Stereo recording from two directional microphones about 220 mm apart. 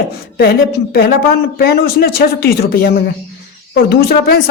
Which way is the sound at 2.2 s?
45° left (ahead or behind).